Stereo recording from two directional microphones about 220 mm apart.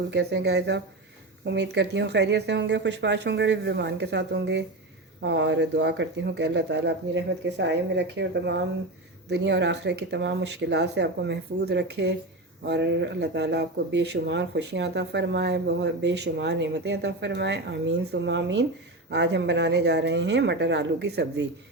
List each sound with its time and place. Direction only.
0.1 s speech: 50° right (ahead or behind)